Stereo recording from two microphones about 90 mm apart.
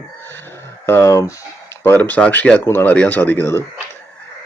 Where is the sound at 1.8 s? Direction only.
20° left (ahead or behind).